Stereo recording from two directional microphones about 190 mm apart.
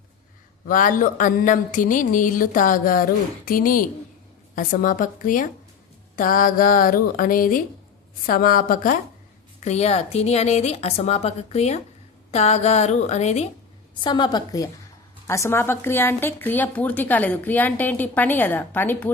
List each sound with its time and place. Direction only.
0.7 s speech: 45° left (ahead or behind)
9.6 s a woman's voice: 35° left (ahead or behind)
14.0 s a woman's voice: 25° left (ahead or behind)